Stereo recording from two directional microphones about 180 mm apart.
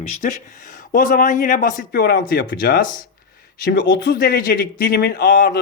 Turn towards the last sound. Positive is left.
turn(degrees=60)  # may be behind; listen again after turning